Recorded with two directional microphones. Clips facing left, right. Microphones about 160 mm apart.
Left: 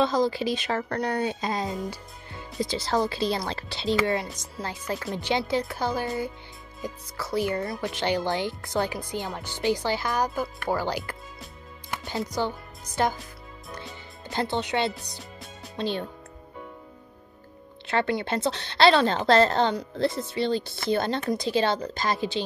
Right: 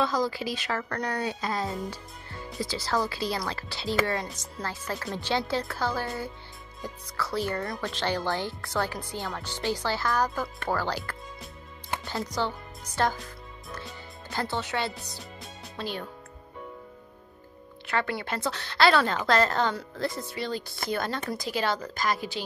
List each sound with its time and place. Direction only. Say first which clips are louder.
0.0 s speech: left 4 dB; 25° left (ahead or behind)
12.4 s speech: left 2 dB; 15° left (ahead or behind)
14.3 s speech: left 4 dB; 20° left (ahead or behind)
17.8 s speech: left 4 dB; 25° left (ahead or behind)